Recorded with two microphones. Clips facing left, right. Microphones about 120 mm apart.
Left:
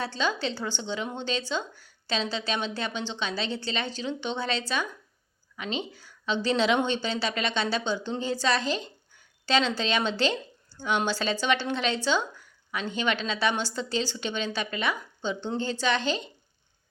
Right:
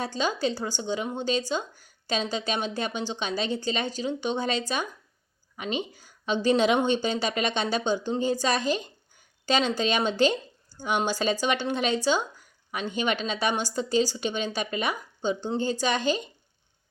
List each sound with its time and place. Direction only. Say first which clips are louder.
0.0 s speech: right 2 dB; 10° right (ahead or behind)